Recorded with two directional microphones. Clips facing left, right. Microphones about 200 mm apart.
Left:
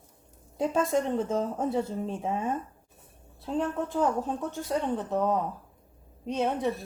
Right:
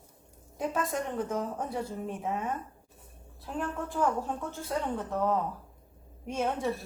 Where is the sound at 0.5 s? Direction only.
25° left (ahead or behind).